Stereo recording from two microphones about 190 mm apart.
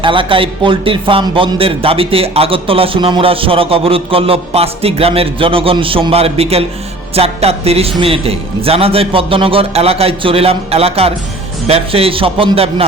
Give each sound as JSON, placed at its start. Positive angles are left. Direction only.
{"t": 0.0, "sound": "a man's voice", "side_deg": -25}